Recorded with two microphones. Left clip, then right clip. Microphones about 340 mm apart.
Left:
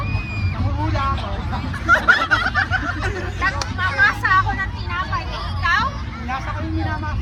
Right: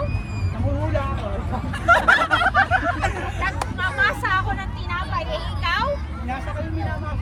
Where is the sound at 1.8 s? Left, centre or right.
Right.